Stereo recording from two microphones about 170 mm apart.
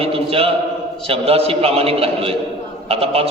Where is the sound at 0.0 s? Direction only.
35° right (ahead or behind).